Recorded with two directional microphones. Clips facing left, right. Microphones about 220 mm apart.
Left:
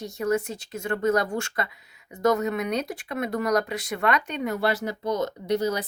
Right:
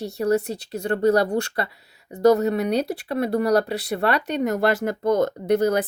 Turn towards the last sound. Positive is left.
turn(degrees=-55)  # may be behind; listen again after turning